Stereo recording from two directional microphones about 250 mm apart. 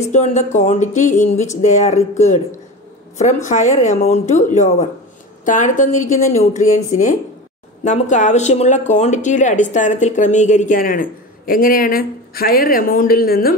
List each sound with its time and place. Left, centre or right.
0.1 s speech: left